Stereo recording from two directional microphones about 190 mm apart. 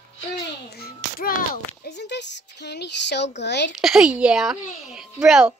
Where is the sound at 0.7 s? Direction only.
55° left (ahead or behind).